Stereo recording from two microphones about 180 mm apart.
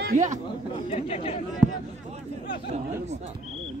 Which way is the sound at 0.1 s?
45° right (ahead or behind).